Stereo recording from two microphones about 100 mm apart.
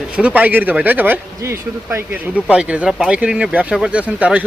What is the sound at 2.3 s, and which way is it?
Speech, 10° right (ahead or behind).